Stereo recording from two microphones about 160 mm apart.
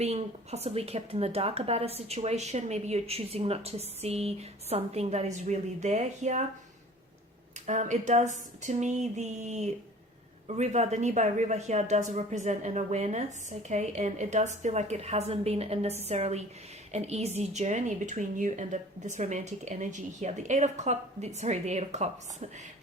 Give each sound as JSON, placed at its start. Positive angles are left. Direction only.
{"t": 0.0, "sound": "a woman's voice", "side_deg": -40}
{"t": 7.7, "sound": "a woman's voice", "side_deg": -45}